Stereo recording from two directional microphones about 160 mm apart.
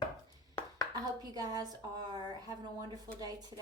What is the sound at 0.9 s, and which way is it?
Speech, 25° right (ahead or behind).